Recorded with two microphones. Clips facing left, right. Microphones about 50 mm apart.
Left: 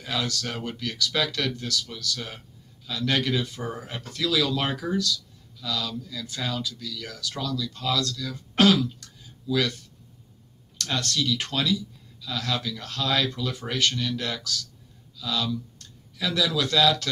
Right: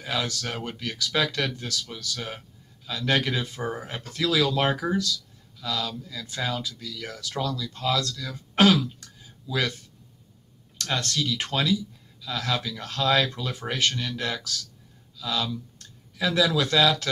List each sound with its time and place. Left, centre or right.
0.0 s speech: centre
8.8 s a sound: right
10.8 s speech: right